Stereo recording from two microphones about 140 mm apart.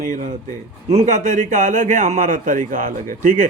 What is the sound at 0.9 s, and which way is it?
A man's voice, 55° right (ahead or behind).